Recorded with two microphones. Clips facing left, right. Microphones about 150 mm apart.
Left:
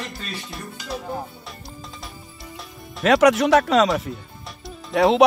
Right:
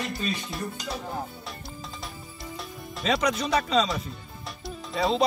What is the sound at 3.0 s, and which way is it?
Speech, 85° left.